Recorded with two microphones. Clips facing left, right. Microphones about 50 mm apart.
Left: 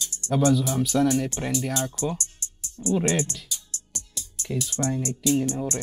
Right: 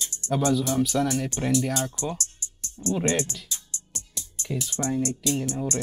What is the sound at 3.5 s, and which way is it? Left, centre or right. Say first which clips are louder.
Music: left 1 dB; right.